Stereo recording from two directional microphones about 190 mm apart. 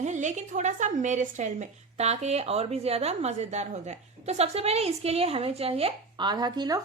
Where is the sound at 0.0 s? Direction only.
40° right (ahead or behind).